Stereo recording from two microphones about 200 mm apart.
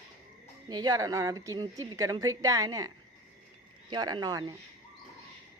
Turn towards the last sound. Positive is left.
turn(degrees=-20)  # may be behind; listen again after turning